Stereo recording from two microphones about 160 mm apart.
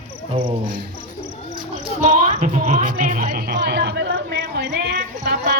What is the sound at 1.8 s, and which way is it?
Music, 45° right (ahead or behind).